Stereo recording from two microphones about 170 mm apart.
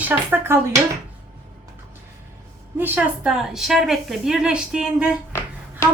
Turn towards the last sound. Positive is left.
turn(degrees=15)  # may be behind; listen again after turning